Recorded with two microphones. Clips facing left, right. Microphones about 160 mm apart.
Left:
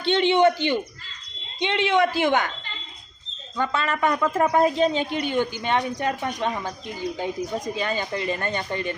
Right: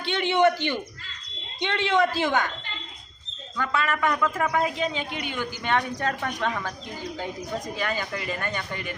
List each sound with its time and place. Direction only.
0.0 s a woman's voice: 25° left (ahead or behind)
3.6 s a woman's voice: 25° left (ahead or behind)
5.6 s a woman's voice: 20° left (ahead or behind)